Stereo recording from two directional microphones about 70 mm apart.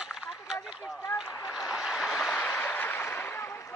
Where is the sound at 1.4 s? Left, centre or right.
Centre.